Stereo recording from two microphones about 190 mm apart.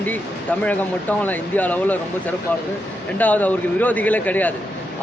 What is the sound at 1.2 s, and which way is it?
Speech, 10° left (ahead or behind).